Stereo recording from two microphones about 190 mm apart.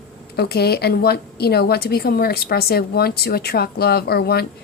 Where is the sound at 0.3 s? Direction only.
55° left (ahead or behind).